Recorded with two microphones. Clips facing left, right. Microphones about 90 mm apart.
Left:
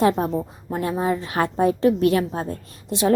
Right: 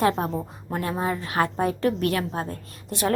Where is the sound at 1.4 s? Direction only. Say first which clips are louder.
Left 3 dB; 25° left (ahead or behind).